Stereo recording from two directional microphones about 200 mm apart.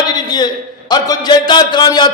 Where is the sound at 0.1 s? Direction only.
20° left (ahead or behind).